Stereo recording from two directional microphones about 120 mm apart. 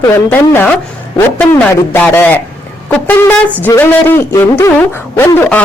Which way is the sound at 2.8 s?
15° left (ahead or behind).